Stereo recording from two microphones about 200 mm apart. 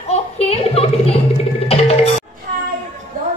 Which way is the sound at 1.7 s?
30° left (ahead or behind).